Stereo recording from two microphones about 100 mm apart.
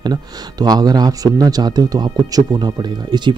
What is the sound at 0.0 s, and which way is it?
Speech, 40° right (ahead or behind).